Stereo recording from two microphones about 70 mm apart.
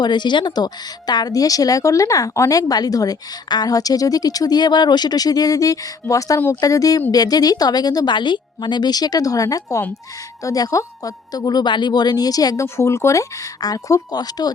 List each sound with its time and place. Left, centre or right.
0.0 s a woman's voice: left
12.6 s speech: left
14.1 s a woman's voice: left